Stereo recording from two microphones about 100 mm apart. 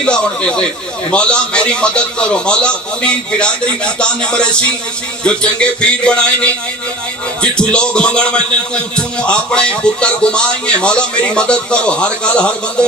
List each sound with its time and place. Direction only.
0.0 s a man's voice: 10° left (ahead or behind)
7.4 s a man's voice: 10° left (ahead or behind)